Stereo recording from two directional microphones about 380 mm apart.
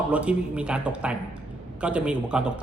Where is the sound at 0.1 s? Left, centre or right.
Centre.